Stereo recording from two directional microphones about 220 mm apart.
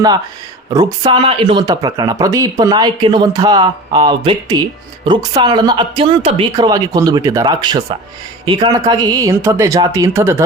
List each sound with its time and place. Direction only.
0.7 s speech: 20° right (ahead or behind)